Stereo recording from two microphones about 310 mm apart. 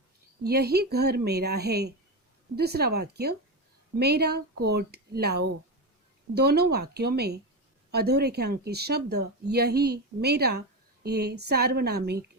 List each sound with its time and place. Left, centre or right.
0.4 s speech: right